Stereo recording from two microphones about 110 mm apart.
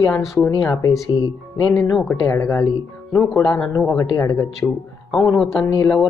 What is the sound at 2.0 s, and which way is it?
Speech, 25° left (ahead or behind).